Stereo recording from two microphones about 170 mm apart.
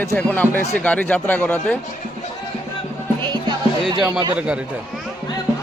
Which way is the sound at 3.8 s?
25° right (ahead or behind).